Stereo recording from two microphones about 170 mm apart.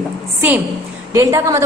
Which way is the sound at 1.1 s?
15° right (ahead or behind).